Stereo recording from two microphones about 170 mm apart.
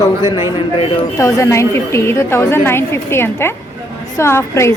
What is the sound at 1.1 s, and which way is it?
A woman's voice, 15° left (ahead or behind).